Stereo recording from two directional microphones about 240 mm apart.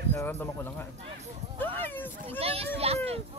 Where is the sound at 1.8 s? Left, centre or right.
Centre.